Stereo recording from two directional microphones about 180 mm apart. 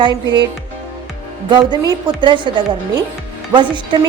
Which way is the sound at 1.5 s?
25° right (ahead or behind).